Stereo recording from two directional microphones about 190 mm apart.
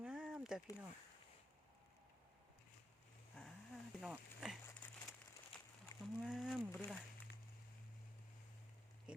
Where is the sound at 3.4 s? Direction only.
5° left (ahead or behind).